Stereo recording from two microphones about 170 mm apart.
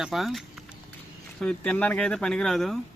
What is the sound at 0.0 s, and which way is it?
Speech, centre (ahead or behind).